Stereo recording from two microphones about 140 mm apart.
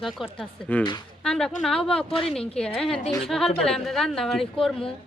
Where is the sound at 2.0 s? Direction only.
40° left (ahead or behind).